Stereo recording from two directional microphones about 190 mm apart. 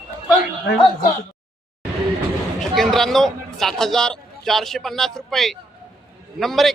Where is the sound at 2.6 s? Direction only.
Centre (ahead or behind).